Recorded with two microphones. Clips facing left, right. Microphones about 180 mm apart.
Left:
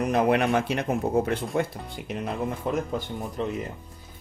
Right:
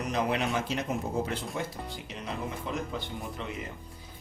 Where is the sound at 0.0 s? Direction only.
55° left (ahead or behind).